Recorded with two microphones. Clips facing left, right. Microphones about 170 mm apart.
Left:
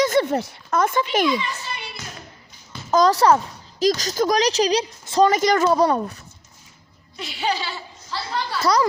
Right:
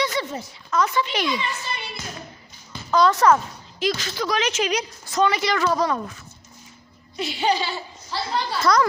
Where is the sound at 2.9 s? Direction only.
40° left (ahead or behind).